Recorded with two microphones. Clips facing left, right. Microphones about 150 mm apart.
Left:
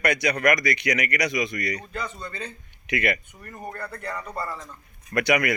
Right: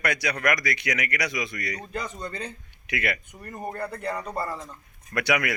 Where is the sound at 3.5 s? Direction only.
25° right (ahead or behind).